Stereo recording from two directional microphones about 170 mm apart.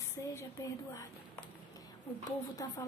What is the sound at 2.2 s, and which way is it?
Speech, 20° left (ahead or behind).